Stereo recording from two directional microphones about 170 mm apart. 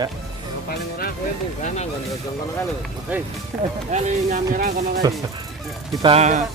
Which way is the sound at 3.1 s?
10° right (ahead or behind).